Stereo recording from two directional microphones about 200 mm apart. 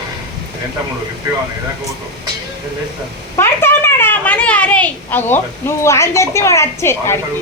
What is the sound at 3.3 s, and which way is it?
A woman's voice, 10° left (ahead or behind).